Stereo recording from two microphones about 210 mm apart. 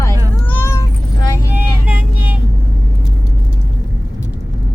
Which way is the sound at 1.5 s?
10° right (ahead or behind).